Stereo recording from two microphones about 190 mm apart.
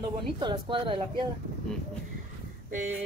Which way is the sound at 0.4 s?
25° right (ahead or behind).